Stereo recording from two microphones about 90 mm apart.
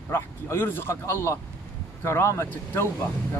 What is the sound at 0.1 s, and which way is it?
Speech, 25° left (ahead or behind).